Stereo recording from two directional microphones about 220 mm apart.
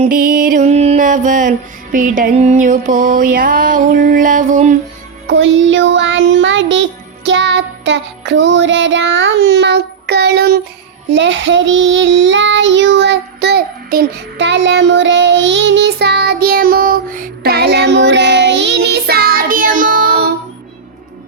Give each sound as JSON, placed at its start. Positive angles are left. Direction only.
{"t": 0.0, "sound": "music", "side_deg": -40}
{"t": 5.3, "sound": "child singing", "side_deg": -55}
{"t": 7.3, "sound": "music", "side_deg": -55}
{"t": 11.1, "sound": "child singing", "side_deg": -55}